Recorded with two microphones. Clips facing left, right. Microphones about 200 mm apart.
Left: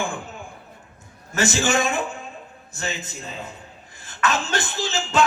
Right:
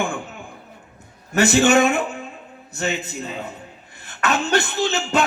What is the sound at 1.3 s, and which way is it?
A man's voice, 60° right (ahead or behind).